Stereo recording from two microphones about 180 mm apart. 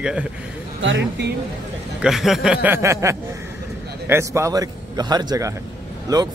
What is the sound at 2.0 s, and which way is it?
A man's voice, centre (ahead or behind).